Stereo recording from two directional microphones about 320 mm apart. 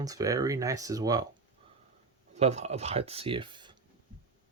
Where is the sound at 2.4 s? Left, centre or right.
Centre.